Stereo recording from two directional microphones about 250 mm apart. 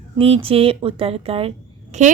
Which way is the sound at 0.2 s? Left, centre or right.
Right.